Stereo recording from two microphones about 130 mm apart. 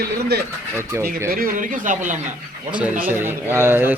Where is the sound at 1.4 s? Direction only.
90° right.